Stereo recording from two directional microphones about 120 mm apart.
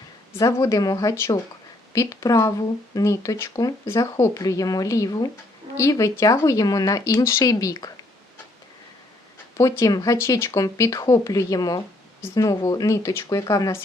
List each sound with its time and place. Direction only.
0.3 s speech: 30° left (ahead or behind)
9.6 s speech: 25° left (ahead or behind)